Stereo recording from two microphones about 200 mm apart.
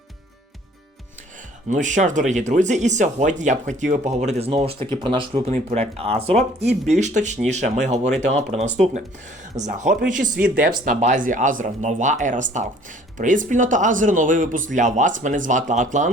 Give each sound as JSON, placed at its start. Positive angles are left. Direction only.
{"t": 1.7, "sound": "speech", "side_deg": -40}